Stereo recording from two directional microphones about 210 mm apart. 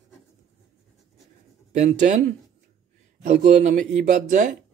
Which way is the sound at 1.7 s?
35° right (ahead or behind).